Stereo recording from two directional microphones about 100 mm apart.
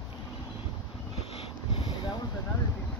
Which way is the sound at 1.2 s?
75° left (ahead or behind).